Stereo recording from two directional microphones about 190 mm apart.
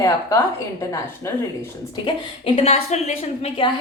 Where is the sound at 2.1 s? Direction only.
30° left (ahead or behind).